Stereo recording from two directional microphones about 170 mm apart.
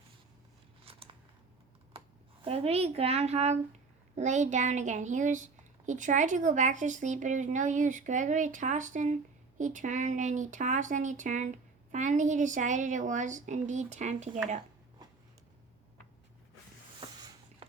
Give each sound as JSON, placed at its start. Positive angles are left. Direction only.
{"t": 0.9, "sound": "scissors", "side_deg": -35}
{"t": 2.4, "sound": "speech", "side_deg": -35}
{"t": 17.6, "sound": "a sound", "side_deg": -35}